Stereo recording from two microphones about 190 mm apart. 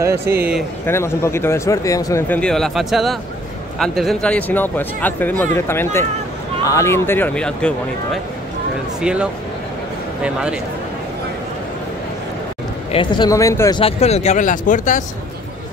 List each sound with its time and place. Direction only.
0.8 s speech: 15° left (ahead or behind); by 9.3 s 5° right (ahead or behind)
12.9 s speech: 25° left (ahead or behind); by 15.0 s 40° left (ahead or behind)